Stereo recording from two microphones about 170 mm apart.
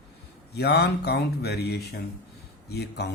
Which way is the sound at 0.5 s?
75° left (ahead or behind).